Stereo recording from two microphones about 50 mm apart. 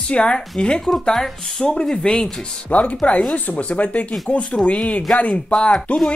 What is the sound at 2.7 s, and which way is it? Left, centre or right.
Speech, left.